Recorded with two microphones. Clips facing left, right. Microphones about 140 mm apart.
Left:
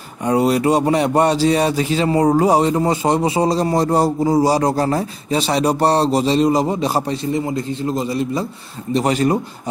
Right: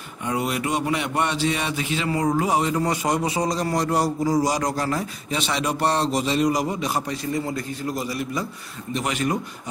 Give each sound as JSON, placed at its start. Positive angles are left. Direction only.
{"t": 0.2, "sound": "speech", "side_deg": 35}